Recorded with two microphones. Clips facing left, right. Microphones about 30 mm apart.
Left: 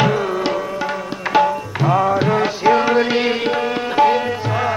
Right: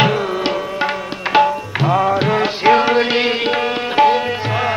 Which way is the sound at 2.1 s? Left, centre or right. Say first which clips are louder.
Right 1 dB; right.